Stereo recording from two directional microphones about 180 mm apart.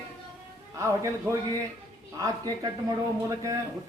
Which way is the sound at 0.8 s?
20° right (ahead or behind).